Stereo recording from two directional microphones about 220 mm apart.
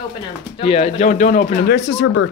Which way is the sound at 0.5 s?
25° left (ahead or behind).